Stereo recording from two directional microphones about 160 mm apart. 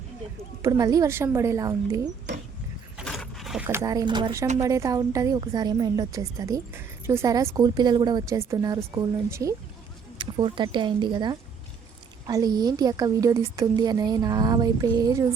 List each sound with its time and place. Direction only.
0.6 s a woman's voice: 25° right (ahead or behind)
3.0 s mechanisms: centre (ahead or behind)
3.7 s a woman's voice: 20° right (ahead or behind)
10.2 s a woman's voice: 30° right (ahead or behind)